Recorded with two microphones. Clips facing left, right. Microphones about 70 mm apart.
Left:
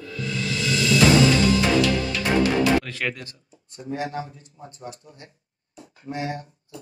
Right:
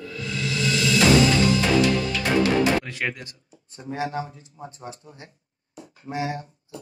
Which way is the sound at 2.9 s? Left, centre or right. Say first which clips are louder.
Even; centre.